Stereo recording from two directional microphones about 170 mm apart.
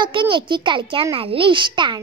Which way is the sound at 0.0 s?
30° right (ahead or behind).